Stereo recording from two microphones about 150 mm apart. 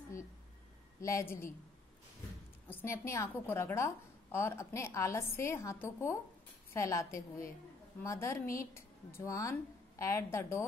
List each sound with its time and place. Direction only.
1.0 s a woman's voice: 20° left (ahead or behind)
2.7 s a woman's voice: 15° left (ahead or behind)